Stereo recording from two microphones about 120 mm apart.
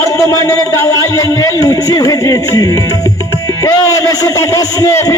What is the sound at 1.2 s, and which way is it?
Speech, 30° left (ahead or behind).